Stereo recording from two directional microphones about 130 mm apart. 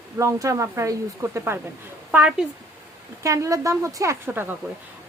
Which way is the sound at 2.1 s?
10° right (ahead or behind).